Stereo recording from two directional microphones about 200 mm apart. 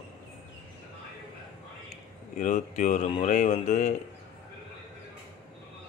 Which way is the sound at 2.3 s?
40° left (ahead or behind).